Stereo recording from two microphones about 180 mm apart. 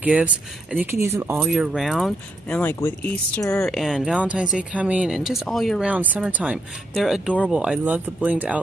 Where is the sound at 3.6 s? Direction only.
Centre (ahead or behind).